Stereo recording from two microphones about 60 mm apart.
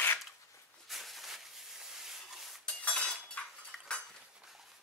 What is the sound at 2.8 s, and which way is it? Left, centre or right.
Chink, centre.